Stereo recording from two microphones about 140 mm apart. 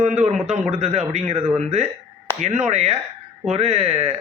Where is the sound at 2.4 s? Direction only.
55° right (ahead or behind).